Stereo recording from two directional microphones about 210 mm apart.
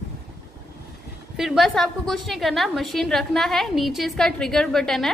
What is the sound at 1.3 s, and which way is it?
A woman's voice, centre (ahead or behind).